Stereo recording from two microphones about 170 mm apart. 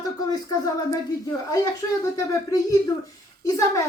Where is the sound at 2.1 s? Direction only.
20° left (ahead or behind).